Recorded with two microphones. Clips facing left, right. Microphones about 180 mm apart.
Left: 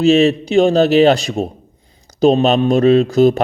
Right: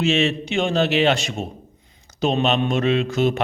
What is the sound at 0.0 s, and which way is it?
Mantra, 35° left (ahead or behind).